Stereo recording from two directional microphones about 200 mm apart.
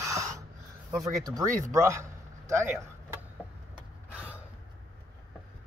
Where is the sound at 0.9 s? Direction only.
20° right (ahead or behind).